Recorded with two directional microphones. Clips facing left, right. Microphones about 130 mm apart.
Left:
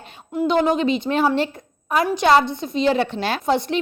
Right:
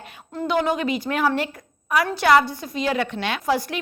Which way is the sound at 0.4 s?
20° left (ahead or behind).